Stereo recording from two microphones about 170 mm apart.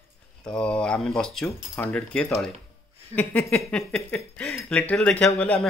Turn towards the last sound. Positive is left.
turn(degrees=5)  # may be behind; listen again after turning